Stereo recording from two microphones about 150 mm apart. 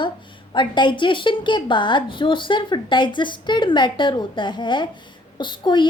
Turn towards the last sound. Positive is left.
turn(degrees=30)  # may be behind; listen again after turning